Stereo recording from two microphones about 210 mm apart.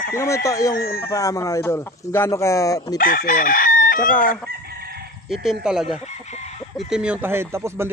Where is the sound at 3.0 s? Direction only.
40° left (ahead or behind).